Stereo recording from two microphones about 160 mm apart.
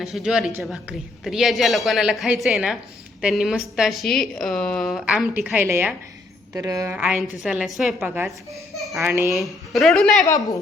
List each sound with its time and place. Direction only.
0.0 s a woman's voice: 5° right (ahead or behind); by 6.9 s 20° right (ahead or behind)
6.9 s a woman's voice: 10° right (ahead or behind)